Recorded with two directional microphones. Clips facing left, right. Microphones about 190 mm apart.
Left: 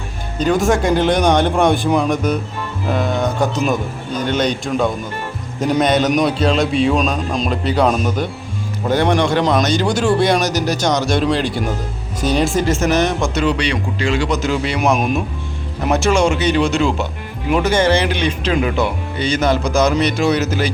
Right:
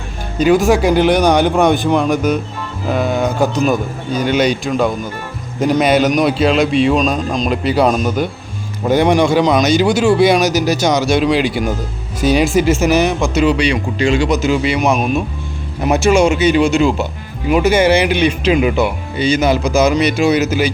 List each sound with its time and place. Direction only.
0.3 s speech: 5° right (ahead or behind)
15.8 s speech: 5° right (ahead or behind)